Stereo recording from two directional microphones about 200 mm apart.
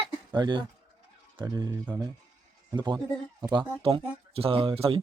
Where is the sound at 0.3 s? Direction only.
20° right (ahead or behind).